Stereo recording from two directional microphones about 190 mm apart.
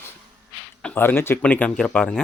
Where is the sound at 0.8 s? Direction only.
10° left (ahead or behind).